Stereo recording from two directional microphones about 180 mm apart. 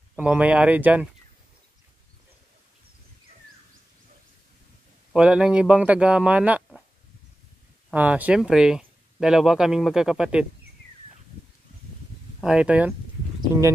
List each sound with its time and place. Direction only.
0.2 s speech: 5° right (ahead or behind)
5.1 s speech: 5° right (ahead or behind)
7.9 s speech: 10° right (ahead or behind)
12.4 s speech: 5° right (ahead or behind)